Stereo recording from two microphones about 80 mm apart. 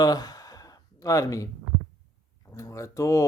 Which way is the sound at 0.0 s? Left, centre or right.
Left.